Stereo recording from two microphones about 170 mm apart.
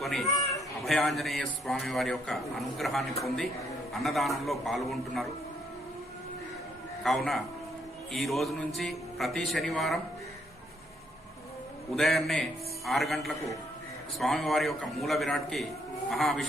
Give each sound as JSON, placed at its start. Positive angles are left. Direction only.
{"t": 0.0, "sound": "speech", "side_deg": 0}
{"t": 0.3, "sound": "a sound", "side_deg": 20}
{"t": 0.9, "sound": "speech", "side_deg": 0}
{"t": 7.0, "sound": "speech", "side_deg": 0}
{"t": 11.9, "sound": "speech", "side_deg": 0}